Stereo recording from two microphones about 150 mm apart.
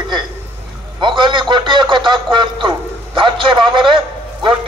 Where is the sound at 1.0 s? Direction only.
30° right (ahead or behind).